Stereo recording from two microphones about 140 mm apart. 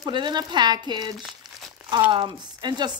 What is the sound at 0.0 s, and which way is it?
Speech, 30° right (ahead or behind).